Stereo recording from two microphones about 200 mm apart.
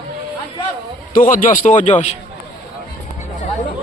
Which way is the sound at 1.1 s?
45° left (ahead or behind).